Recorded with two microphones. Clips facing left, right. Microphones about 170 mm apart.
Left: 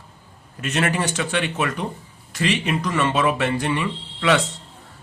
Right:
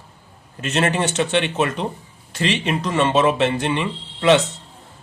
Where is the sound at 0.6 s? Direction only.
25° right (ahead or behind).